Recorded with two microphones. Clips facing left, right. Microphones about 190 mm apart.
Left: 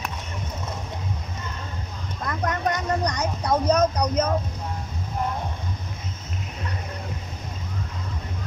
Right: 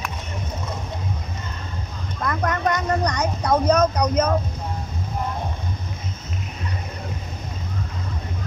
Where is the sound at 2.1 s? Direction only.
60° right (ahead or behind).